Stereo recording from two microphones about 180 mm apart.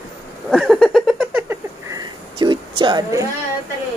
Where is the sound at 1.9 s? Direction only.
25° right (ahead or behind).